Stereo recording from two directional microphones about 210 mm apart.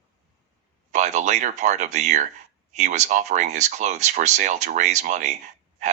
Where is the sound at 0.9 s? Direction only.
35° right (ahead or behind).